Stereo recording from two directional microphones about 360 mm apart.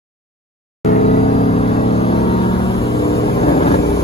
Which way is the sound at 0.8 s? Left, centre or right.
Centre.